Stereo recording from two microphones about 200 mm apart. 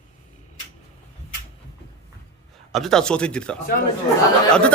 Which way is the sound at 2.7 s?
Centre (ahead or behind).